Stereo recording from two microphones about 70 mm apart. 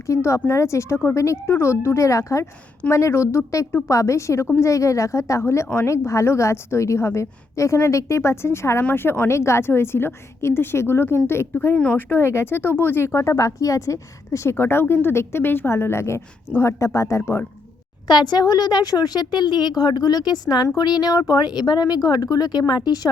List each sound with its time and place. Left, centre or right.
0.1 s a woman's voice: left
13.1 s a woman's voice: left
18.1 s a woman's voice: left